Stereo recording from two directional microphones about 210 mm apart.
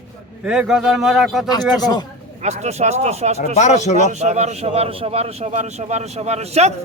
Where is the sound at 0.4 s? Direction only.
5° right (ahead or behind).